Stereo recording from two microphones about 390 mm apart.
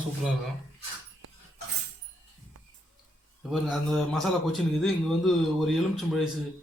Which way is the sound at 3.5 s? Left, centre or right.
Centre.